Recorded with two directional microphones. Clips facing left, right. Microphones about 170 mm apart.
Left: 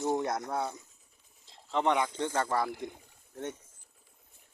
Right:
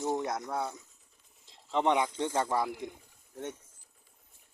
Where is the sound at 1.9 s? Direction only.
20° right (ahead or behind).